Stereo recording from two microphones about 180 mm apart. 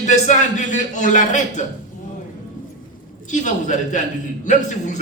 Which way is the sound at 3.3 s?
45° left (ahead or behind).